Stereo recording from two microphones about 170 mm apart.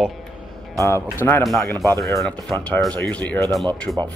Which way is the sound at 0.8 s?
15° left (ahead or behind).